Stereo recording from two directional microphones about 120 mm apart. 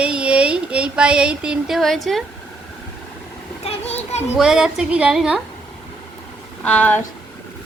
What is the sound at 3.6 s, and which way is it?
Children playing, 65° left (ahead or behind).